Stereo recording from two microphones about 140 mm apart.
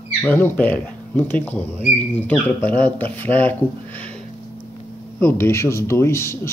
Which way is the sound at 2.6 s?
10° left (ahead or behind).